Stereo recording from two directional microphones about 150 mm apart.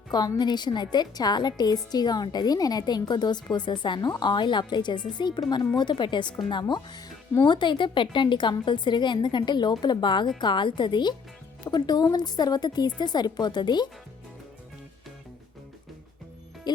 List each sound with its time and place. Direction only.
0.1 s a woman's voice: 25° left (ahead or behind)
16.7 s music: 25° left (ahead or behind)